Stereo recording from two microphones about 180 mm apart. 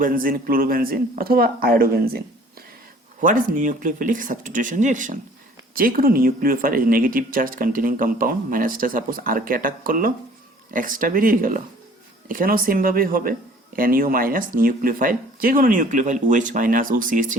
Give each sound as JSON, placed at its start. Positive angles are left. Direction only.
{"t": 0.0, "sound": "speech", "side_deg": -50}